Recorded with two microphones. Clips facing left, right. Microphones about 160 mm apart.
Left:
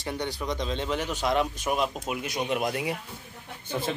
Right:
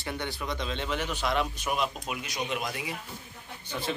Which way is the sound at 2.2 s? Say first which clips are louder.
Left 6 dB; 55° left (ahead or behind).